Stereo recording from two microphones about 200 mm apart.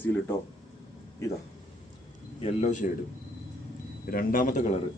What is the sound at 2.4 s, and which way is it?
Speech, 35° left (ahead or behind).